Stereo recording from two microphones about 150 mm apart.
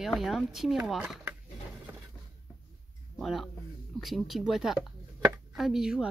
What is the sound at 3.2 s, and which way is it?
Speech, centre (ahead or behind).